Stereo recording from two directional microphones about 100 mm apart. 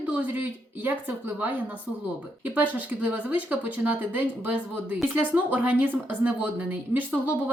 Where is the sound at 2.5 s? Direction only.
15° right (ahead or behind).